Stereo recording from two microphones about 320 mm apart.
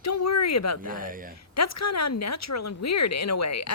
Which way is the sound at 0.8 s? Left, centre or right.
Right.